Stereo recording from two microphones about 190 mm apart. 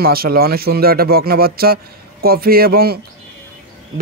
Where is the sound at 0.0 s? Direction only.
50° right (ahead or behind).